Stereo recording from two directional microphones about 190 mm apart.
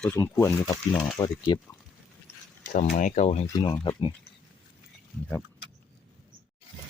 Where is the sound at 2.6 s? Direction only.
45° left (ahead or behind).